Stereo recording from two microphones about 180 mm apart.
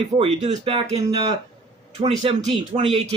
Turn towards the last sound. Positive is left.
turn(degrees=-35)  # may be behind; listen again after turning